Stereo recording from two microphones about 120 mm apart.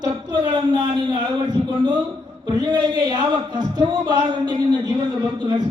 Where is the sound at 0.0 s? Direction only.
35° right (ahead or behind).